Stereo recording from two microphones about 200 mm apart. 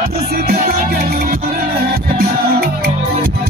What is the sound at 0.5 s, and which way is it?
Music, 45° right (ahead or behind).